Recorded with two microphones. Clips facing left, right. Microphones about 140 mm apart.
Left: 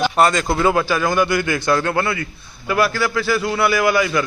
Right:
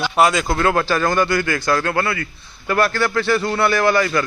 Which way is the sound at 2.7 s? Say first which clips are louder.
Even; 5° left (ahead or behind).